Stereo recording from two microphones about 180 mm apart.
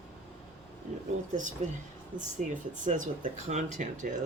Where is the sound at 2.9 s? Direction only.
45° right (ahead or behind).